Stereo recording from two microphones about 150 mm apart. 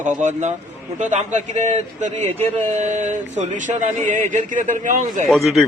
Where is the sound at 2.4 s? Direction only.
50° right (ahead or behind).